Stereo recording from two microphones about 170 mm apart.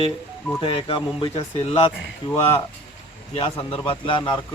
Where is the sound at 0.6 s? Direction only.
30° left (ahead or behind).